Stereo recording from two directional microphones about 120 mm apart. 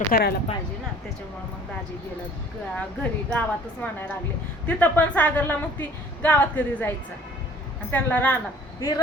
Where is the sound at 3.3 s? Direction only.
10° left (ahead or behind).